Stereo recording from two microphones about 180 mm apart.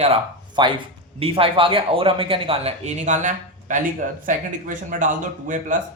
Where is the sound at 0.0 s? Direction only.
30° right (ahead or behind).